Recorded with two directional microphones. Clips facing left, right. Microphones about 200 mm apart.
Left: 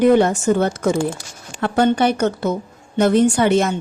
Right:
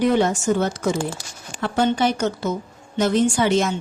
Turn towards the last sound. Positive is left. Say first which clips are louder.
# left 3 dB
turn(degrees=60)  # may be behind; listen again after turning